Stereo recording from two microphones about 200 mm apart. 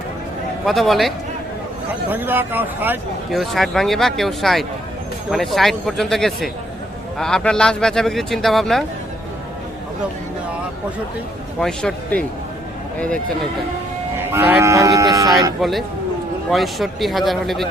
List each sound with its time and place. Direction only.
0.6 s speech: centre (ahead or behind)
11.6 s speech: 5° left (ahead or behind)
14.2 s speech: 10° right (ahead or behind)
15.6 s speech: centre (ahead or behind)